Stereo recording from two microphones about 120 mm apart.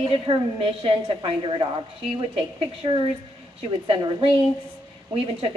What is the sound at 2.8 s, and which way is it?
A woman's voice, 45° right (ahead or behind).